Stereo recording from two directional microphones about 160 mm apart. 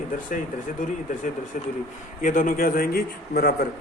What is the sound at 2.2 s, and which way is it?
A man's voice, 55° left (ahead or behind).